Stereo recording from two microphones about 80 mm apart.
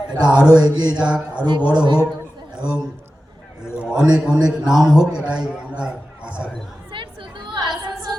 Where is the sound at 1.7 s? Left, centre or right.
Right.